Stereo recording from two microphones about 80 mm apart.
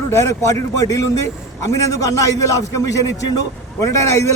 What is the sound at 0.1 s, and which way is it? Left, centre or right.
A man's voice, left.